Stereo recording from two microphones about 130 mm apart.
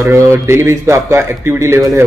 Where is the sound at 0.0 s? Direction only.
20° right (ahead or behind).